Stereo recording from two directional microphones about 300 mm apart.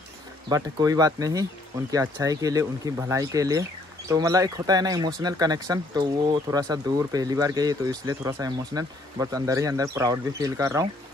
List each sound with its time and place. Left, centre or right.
0.5 s speech: centre